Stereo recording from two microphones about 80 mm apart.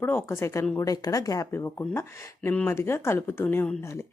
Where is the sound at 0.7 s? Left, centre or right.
Left.